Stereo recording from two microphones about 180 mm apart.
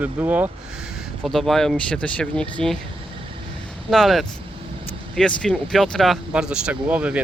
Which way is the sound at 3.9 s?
Centre (ahead or behind).